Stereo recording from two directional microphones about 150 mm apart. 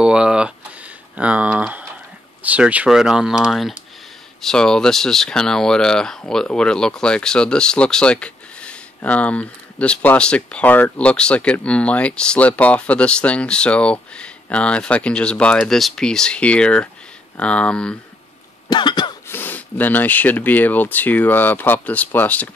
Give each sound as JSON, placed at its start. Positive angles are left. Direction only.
{"t": 0.0, "sound": "a sound", "side_deg": -5}
{"t": 2.4, "sound": "speech", "side_deg": -10}
{"t": 18.7, "sound": "throat clearing", "side_deg": 30}
{"t": 19.2, "sound": "speech", "side_deg": 15}